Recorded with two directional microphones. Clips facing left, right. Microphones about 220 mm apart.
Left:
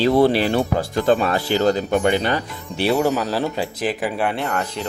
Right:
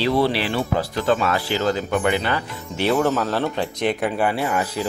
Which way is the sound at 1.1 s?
30° left (ahead or behind).